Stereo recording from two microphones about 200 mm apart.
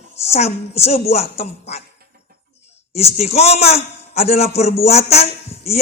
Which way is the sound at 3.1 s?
30° left (ahead or behind).